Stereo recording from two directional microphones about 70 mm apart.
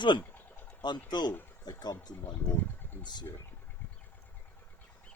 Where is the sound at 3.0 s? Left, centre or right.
Left.